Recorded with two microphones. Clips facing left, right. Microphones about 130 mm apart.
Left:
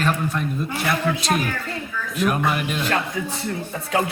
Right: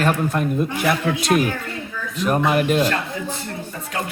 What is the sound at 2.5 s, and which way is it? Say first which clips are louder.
Speech: right 6 dB; 45° right (ahead or behind).